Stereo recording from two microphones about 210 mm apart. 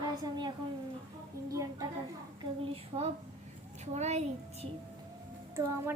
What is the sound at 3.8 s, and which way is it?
Speech, 30° right (ahead or behind).